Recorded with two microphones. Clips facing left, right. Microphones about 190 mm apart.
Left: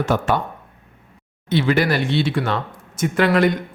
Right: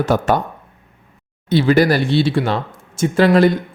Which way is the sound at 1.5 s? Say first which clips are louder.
Right 5 dB; 35° right (ahead or behind).